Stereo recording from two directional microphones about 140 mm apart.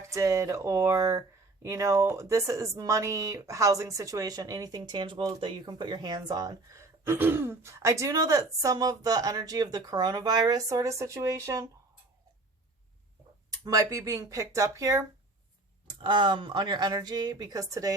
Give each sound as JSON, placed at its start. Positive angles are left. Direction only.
{"t": 0.1, "sound": "speech", "side_deg": -20}
{"t": 13.7, "sound": "speech", "side_deg": -25}
{"t": 16.0, "sound": "speech", "side_deg": -35}